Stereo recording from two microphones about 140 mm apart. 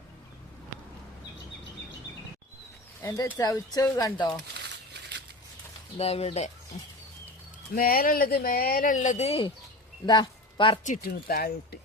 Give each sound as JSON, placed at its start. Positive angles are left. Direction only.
{"t": 3.0, "sound": "speech", "side_deg": 25}
{"t": 6.0, "sound": "speech", "side_deg": 45}
{"t": 7.8, "sound": "speech", "side_deg": 90}
{"t": 10.1, "sound": "a sound", "side_deg": 35}
{"t": 10.8, "sound": "speech", "side_deg": 75}